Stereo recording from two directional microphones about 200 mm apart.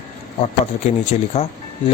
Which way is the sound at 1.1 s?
35° left (ahead or behind).